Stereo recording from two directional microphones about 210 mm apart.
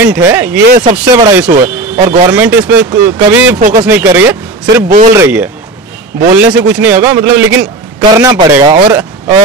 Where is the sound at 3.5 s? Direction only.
40° right (ahead or behind).